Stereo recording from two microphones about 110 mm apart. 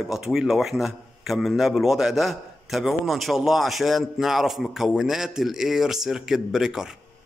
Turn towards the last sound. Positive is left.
turn(degrees=-5)  # may be behind; listen again after turning